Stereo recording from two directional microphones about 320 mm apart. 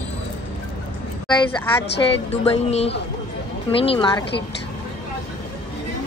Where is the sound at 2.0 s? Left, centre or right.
Centre.